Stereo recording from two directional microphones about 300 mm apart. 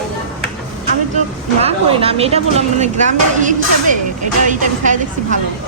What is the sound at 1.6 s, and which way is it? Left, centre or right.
Speech, centre.